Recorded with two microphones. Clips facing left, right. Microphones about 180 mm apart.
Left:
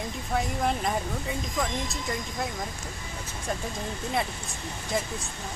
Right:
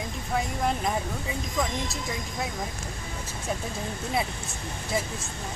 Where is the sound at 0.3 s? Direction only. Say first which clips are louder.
Even; centre (ahead or behind).